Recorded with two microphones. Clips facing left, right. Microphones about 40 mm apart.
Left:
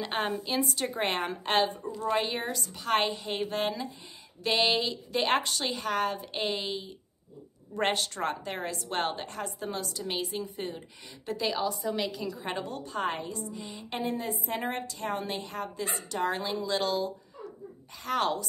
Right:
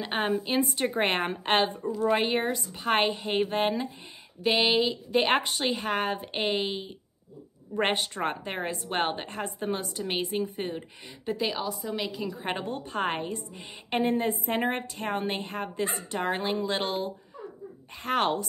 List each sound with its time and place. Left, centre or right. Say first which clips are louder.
0.0 s a woman's voice: right 3 dB; centre
0.6 s a woman's voice: right 3 dB; right
4.4 s a woman's voice: right 3 dB; centre
5.1 s a woman's voice: right 2 dB; right
11.2 s a woman's voice: even; centre
12.4 s speech: right 3 dB; right